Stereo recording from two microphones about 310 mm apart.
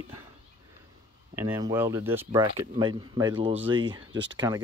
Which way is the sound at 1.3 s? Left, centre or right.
Centre.